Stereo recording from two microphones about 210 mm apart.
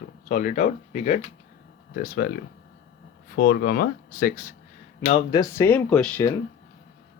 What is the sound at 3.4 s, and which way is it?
Speech, 50° left (ahead or behind).